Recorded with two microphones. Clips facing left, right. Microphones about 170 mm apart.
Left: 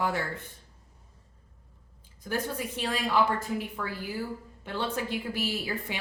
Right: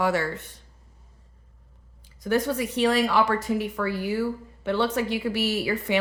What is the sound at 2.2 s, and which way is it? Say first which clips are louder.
Speech: right 8 dB; 80° right.